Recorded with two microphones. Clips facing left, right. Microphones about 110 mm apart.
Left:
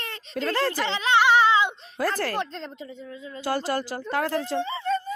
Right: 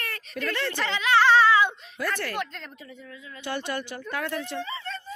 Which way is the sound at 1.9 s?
40° left (ahead or behind).